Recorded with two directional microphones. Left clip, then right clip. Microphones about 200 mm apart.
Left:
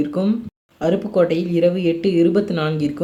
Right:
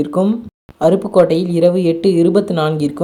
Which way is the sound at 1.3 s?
65° right (ahead or behind).